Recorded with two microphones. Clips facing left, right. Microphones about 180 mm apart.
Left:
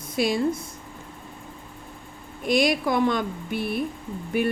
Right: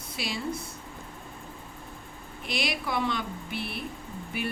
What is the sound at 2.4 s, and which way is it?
A woman's voice, 45° left (ahead or behind).